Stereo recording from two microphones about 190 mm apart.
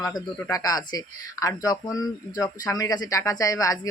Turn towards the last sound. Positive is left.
turn(degrees=20)  # may be behind; listen again after turning